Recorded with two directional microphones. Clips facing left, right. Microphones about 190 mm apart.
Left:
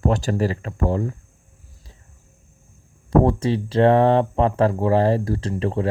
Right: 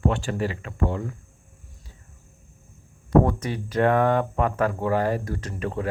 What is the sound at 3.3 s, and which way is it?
Speech, 30° left (ahead or behind).